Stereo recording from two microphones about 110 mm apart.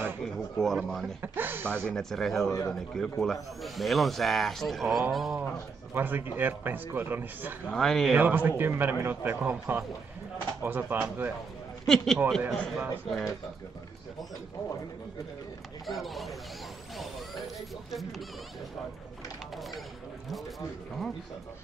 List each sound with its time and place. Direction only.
0.4 s speech: 5° left (ahead or behind)
1.2 s speech: 20° right (ahead or behind)
1.9 s speech: 5° left (ahead or behind)
5.9 s a man's voice: 20° right (ahead or behind)
7.7 s speech: 5° left (ahead or behind)
8.2 s a man's voice: 15° right (ahead or behind)
11.8 s a man's voice: 5° left (ahead or behind)
15.9 s speech: centre (ahead or behind)